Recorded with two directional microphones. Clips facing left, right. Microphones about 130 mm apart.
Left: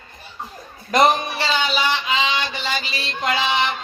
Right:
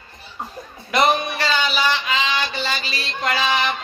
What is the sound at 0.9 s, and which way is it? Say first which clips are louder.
Speech: left 3 dB; 40° left (ahead or behind).